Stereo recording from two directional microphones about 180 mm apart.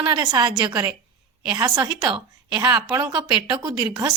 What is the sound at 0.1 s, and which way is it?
A woman's voice, 25° right (ahead or behind).